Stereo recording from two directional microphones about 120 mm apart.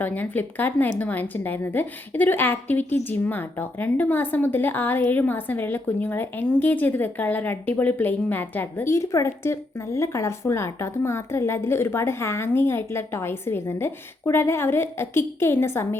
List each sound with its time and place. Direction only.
0.0 s a woman's voice: 15° left (ahead or behind)